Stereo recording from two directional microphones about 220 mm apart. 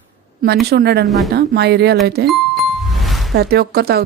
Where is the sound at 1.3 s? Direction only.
50° right (ahead or behind).